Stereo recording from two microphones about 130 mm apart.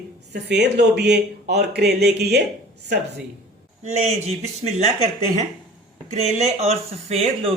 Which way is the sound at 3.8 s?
55° right (ahead or behind).